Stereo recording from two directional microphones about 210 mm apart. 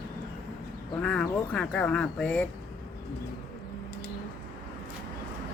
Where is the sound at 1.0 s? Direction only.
5° left (ahead or behind).